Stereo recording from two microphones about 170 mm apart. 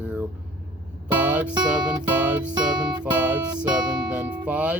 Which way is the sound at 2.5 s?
25° right (ahead or behind).